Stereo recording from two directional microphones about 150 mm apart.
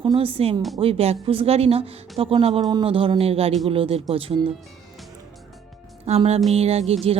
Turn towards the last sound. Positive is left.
turn(degrees=-45)  # may be behind; listen again after turning